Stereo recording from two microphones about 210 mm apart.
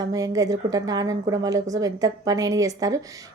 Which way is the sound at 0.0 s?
15° right (ahead or behind).